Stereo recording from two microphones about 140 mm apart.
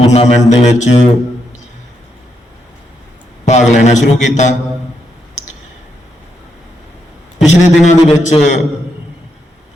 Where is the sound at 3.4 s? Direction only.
55° left (ahead or behind).